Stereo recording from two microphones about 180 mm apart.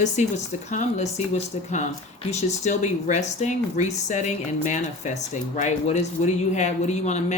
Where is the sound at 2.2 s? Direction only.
40° left (ahead or behind).